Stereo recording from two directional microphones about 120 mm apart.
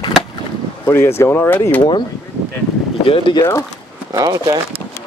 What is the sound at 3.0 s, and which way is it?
Speech, 45° left (ahead or behind).